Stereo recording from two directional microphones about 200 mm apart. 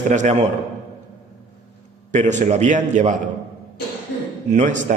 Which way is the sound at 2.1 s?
35° right (ahead or behind).